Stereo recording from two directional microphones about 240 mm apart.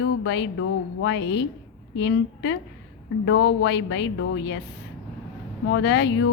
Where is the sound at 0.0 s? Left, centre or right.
Left.